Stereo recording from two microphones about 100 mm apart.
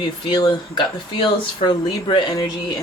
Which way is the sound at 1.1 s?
55° left (ahead or behind).